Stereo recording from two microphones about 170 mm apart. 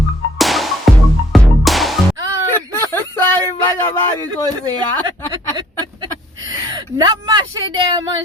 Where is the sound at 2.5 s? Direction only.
10° left (ahead or behind).